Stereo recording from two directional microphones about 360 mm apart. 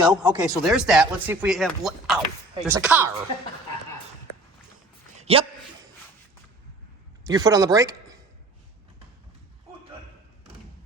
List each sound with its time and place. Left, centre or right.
0.1 s speech: centre
5.2 s speech: centre
7.3 s speech: centre